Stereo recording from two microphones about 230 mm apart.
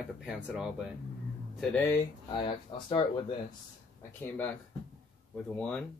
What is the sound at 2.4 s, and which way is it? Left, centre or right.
Speech, left.